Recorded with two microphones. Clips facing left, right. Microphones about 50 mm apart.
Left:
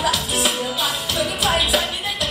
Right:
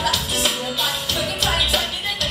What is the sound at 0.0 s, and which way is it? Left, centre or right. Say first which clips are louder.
Music: left 1 dB; centre.